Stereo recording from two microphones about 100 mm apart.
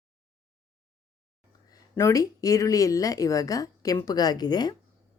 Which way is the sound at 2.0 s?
30° left (ahead or behind).